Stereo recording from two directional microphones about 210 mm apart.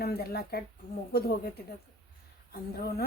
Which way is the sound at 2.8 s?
50° left (ahead or behind).